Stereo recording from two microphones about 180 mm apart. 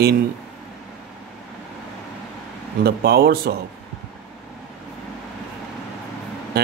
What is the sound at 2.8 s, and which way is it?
Speech, 60° right (ahead or behind).